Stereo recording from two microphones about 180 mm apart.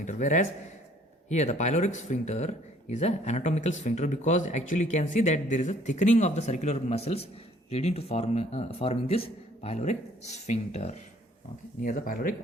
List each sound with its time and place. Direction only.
0.0 s a man's voice: 45° left (ahead or behind)
11.8 s speech: 50° left (ahead or behind)